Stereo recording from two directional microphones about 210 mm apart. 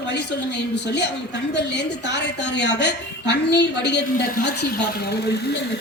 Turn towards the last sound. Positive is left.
turn(degrees=50)  # may be behind; listen again after turning